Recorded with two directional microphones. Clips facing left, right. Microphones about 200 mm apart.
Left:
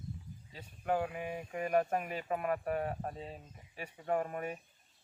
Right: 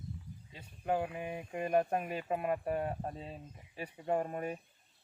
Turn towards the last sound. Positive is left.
turn(degrees=-30)  # may be behind; listen again after turning